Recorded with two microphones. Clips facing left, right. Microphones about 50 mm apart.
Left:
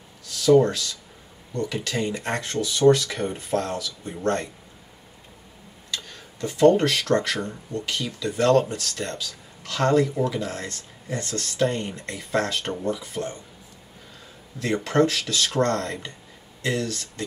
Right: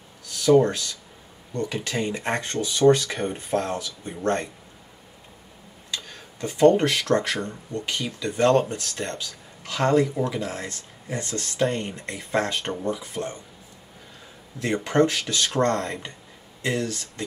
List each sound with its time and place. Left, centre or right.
0.5 s speech: centre
6.0 s tick-tock: right
6.8 s speech: centre
14.6 s speech: centre
16.6 s speech: centre